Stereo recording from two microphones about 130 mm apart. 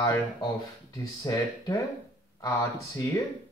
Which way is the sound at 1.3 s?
25° left (ahead or behind).